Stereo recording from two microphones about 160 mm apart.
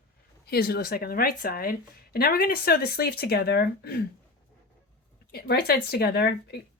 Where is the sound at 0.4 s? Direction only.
80° left.